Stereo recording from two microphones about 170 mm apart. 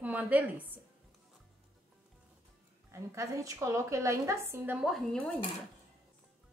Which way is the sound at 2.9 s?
20° right (ahead or behind).